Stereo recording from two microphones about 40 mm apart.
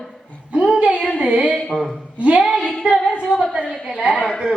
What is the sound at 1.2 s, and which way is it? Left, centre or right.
Speech, right.